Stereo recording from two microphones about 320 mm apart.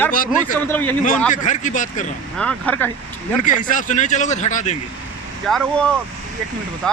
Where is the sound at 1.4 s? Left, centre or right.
Left.